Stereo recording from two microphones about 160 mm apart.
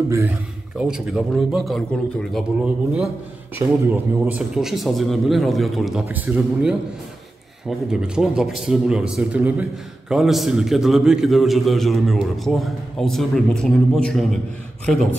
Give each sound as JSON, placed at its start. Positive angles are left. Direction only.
{"t": 0.1, "sound": "speech", "side_deg": -15}
{"t": 0.7, "sound": "speech", "side_deg": -5}
{"t": 4.4, "sound": "speech", "side_deg": 0}